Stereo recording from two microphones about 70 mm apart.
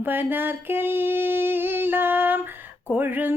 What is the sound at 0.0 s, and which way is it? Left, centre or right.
Female singing, right.